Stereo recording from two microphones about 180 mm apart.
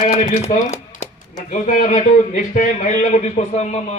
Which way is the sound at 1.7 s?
45° left (ahead or behind).